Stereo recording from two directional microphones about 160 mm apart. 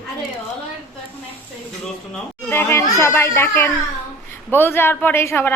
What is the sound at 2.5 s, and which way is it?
A woman's voice, 15° left (ahead or behind).